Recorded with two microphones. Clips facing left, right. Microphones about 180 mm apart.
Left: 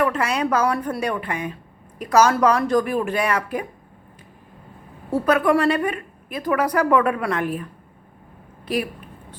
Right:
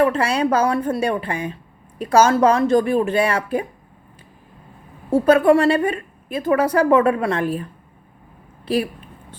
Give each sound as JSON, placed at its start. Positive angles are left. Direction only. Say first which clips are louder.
{"t": 0.0, "sound": "a woman's voice", "louder": "right 4 dB", "side_deg": -30}
{"t": 5.1, "sound": "a woman's voice", "louder": "right 5 dB", "side_deg": -30}